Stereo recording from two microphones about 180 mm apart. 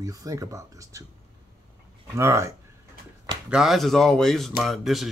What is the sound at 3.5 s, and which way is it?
Speech, centre (ahead or behind).